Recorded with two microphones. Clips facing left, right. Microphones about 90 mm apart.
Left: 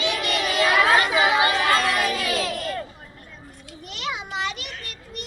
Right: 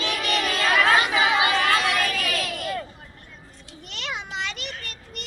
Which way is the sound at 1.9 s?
20° left (ahead or behind).